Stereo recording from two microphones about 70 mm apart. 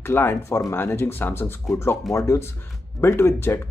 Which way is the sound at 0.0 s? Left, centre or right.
Left.